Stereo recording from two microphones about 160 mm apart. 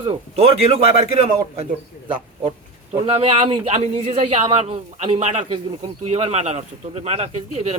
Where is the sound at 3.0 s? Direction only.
40° right (ahead or behind).